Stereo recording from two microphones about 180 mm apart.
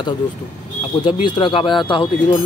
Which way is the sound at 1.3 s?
25° left (ahead or behind).